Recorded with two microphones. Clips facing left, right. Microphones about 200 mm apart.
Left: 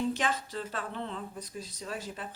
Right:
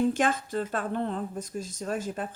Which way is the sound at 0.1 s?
50° right (ahead or behind).